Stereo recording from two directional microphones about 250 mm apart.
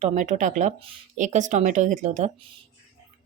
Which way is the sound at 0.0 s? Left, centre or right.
Right.